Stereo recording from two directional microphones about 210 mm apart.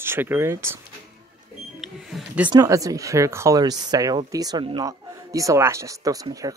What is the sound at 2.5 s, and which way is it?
Speech, 15° right (ahead or behind).